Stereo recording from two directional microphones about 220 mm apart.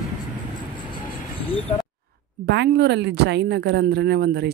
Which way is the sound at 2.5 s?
50° right (ahead or behind).